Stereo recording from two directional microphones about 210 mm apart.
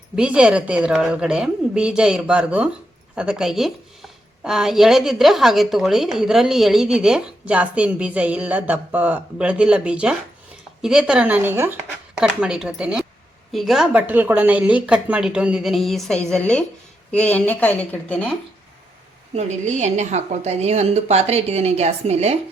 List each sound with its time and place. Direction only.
0.2 s a woman's voice: 5° right (ahead or behind)
19.3 s a woman's voice: 35° right (ahead or behind)